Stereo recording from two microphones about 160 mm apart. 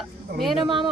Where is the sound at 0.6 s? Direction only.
30° right (ahead or behind).